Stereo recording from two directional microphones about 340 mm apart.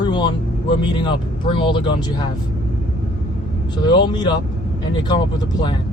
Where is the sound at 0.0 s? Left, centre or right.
Centre.